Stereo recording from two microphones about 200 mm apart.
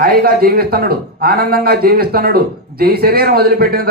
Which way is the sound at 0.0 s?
50° right (ahead or behind).